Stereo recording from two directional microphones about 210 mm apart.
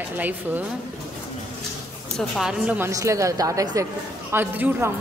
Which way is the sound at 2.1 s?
Centre (ahead or behind).